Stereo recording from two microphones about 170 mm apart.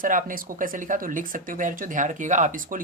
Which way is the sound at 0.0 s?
50° right (ahead or behind).